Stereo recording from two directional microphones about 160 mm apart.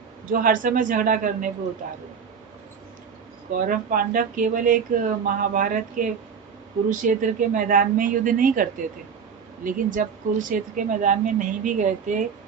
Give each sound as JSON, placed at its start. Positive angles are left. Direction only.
{"t": 0.3, "sound": "speech", "side_deg": -60}
{"t": 3.5, "sound": "speech", "side_deg": -55}
{"t": 9.6, "sound": "speech", "side_deg": -60}